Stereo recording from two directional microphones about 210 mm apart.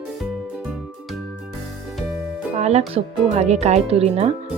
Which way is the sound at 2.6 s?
30° right (ahead or behind).